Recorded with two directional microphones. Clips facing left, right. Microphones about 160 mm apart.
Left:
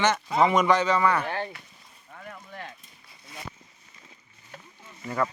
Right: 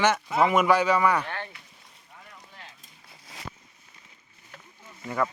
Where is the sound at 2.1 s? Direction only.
70° left (ahead or behind).